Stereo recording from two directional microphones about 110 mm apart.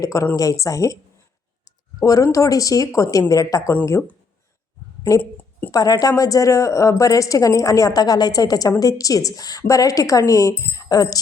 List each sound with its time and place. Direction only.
0.0 s a woman's voice: 30° left (ahead or behind)
2.0 s a woman's voice: 30° left (ahead or behind)
5.2 s a sound: 15° left (ahead or behind)
5.7 s a woman's voice: 35° left (ahead or behind)